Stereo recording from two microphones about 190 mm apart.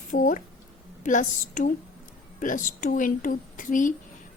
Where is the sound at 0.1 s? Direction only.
45° left (ahead or behind).